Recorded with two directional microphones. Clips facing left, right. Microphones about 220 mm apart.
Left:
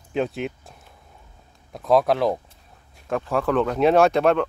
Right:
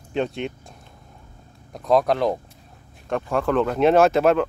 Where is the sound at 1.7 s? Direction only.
Centre (ahead or behind).